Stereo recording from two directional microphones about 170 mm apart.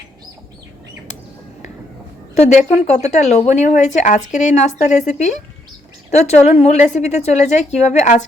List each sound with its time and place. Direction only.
2.3 s a woman's voice: 45° left (ahead or behind)